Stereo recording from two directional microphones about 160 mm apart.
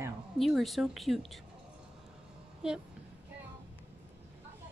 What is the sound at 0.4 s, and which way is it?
A woman's voice, centre (ahead or behind).